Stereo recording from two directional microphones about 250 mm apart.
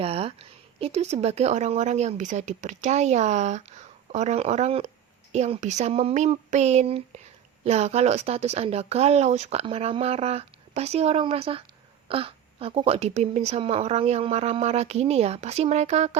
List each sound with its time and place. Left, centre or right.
0.0 s speech: right